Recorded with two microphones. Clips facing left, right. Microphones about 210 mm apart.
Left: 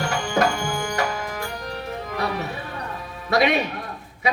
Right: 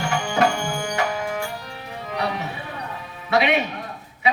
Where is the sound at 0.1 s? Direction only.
40° left (ahead or behind).